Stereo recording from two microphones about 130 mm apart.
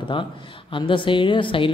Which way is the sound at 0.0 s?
40° left (ahead or behind).